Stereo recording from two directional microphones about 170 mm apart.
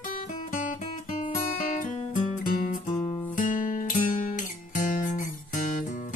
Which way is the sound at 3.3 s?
50° left (ahead or behind).